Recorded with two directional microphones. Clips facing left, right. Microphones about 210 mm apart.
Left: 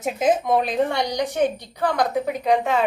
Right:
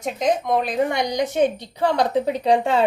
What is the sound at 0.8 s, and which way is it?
A woman's voice, 20° right (ahead or behind).